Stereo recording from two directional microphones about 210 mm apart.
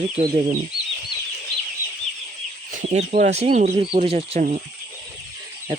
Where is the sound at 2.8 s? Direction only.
35° right (ahead or behind).